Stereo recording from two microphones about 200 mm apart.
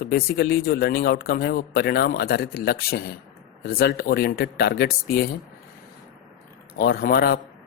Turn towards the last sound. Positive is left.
turn(degrees=50)  # may be behind; listen again after turning